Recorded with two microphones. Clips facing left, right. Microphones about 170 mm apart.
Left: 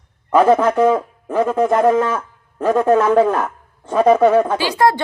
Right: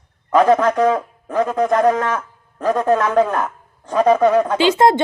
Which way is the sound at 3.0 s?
25° left (ahead or behind).